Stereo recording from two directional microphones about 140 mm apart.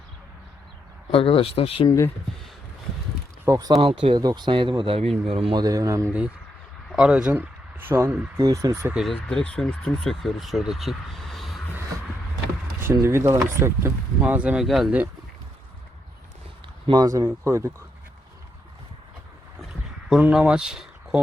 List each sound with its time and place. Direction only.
1.1 s speech: 40° left (ahead or behind)
3.4 s speech: 25° right (ahead or behind)
3.8 s speech: 40° right (ahead or behind)
5.0 s speech: centre (ahead or behind)
5.3 s speech: 40° right (ahead or behind)
5.6 s speech: 25° right (ahead or behind)
6.9 s speech: 5° right (ahead or behind); by 8.9 s 25° right (ahead or behind)
8.9 s speech: centre (ahead or behind)
12.8 s speech: 20° right (ahead or behind); by 14.9 s centre (ahead or behind)
16.8 s speech: 30° right (ahead or behind)
20.1 s speech: 5° right (ahead or behind)